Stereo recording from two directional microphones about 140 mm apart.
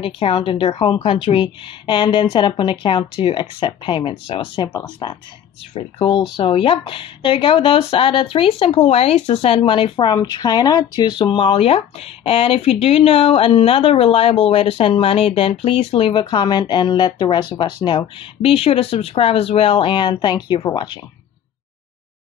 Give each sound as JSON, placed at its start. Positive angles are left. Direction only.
{"t": 0.0, "sound": "speech", "side_deg": 40}